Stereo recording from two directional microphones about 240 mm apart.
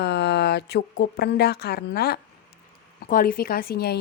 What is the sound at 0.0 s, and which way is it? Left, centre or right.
A woman's voice, left.